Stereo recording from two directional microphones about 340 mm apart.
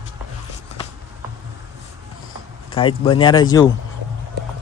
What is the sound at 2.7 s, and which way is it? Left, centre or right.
Speech, centre.